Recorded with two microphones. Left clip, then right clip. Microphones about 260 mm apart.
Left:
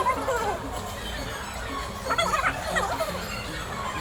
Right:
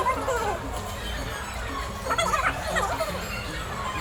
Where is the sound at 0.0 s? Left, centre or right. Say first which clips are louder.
Even; centre.